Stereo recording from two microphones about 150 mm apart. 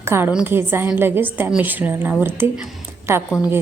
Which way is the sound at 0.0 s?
15° right (ahead or behind).